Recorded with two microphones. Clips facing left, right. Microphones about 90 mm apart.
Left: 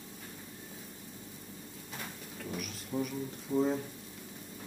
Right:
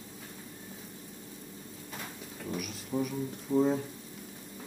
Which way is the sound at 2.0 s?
Centre (ahead or behind).